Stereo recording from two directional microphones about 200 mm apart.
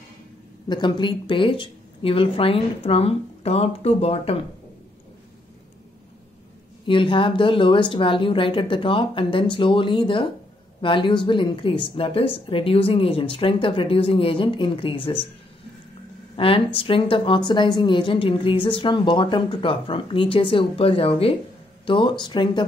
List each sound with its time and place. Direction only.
0.7 s speech: 20° left (ahead or behind)
6.9 s speech: 25° left (ahead or behind)
16.3 s speech: 25° left (ahead or behind)